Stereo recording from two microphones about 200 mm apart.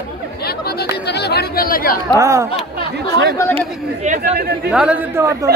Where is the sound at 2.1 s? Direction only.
15° right (ahead or behind).